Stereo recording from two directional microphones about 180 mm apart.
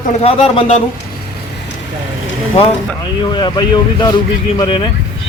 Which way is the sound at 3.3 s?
25° left (ahead or behind).